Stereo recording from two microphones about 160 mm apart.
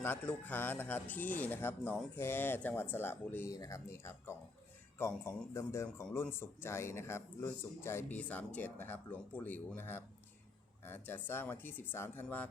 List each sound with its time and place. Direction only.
0.0 s speech: 10° left (ahead or behind)